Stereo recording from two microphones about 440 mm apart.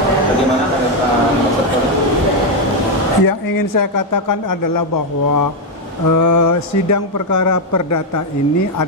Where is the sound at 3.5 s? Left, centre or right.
Left.